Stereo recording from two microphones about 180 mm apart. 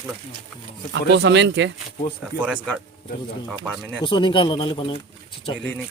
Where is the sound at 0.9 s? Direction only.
80° right.